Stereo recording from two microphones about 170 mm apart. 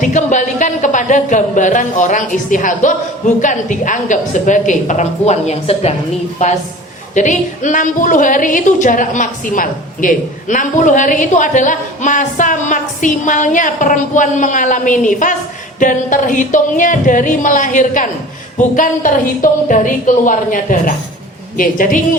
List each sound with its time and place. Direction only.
0.0 s a woman's voice: 45° left (ahead or behind)
7.1 s a woman's voice: 45° left (ahead or behind)